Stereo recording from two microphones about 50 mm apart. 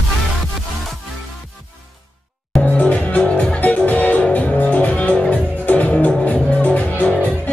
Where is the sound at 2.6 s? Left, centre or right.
Left.